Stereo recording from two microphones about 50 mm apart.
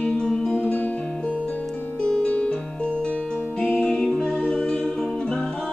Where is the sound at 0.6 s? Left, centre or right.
Left.